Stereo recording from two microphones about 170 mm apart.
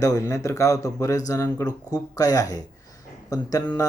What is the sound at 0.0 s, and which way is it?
Speech, 20° left (ahead or behind).